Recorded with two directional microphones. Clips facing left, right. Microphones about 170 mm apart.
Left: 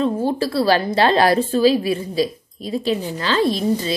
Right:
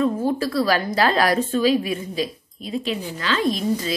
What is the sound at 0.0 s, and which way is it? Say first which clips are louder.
A woman's voice: left 1 dB; 30° left (ahead or behind).